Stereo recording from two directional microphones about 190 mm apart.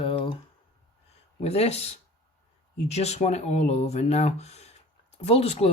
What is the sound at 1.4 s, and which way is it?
Speech, 35° left (ahead or behind).